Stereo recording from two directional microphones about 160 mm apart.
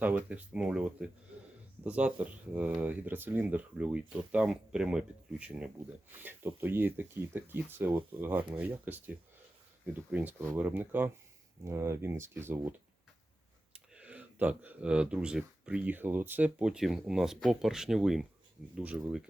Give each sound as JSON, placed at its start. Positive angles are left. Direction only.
{"t": 0.0, "sound": "speech", "side_deg": -10}
{"t": 13.7, "sound": "speech", "side_deg": -5}